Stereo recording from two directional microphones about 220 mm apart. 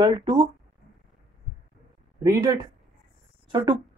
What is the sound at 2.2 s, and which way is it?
Speech, 15° right (ahead or behind).